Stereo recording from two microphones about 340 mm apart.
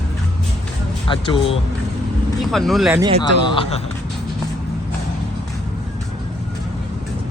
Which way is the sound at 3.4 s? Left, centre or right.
Centre.